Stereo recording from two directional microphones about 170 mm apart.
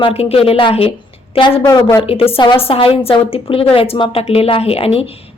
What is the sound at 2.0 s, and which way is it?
A woman's voice, 35° left (ahead or behind).